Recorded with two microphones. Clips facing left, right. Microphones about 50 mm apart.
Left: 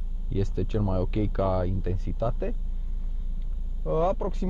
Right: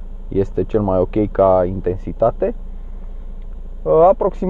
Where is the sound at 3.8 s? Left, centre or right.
Right.